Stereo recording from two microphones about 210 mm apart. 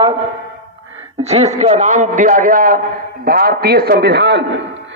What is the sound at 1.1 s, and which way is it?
A man's voice, 30° right (ahead or behind).